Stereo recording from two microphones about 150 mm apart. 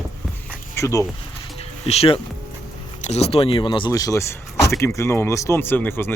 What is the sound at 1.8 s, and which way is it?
Speech, 40° left (ahead or behind).